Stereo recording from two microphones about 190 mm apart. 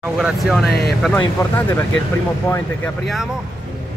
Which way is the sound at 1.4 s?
10° left (ahead or behind).